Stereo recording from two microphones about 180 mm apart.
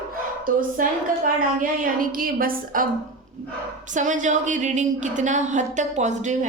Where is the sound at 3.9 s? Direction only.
45° right (ahead or behind).